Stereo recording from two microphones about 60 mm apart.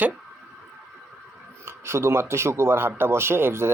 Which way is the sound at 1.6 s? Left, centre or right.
Right.